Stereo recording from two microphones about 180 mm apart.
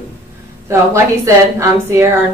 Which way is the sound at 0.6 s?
15° right (ahead or behind).